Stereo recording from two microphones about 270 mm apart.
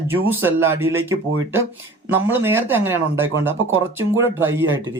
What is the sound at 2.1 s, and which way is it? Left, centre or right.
Speech, centre.